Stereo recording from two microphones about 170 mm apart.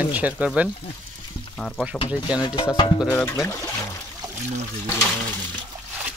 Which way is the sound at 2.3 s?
25° left (ahead or behind).